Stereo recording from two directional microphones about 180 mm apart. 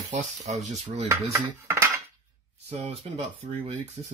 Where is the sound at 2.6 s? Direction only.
35° right (ahead or behind).